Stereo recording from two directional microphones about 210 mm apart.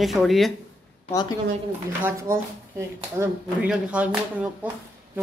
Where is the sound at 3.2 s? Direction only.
5° right (ahead or behind).